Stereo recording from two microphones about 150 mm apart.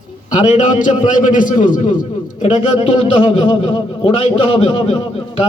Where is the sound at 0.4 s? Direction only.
55° left (ahead or behind).